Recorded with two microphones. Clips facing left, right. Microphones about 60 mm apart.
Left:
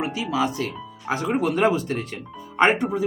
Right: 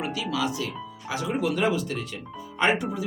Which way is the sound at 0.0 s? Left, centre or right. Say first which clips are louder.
Left 4 dB; left.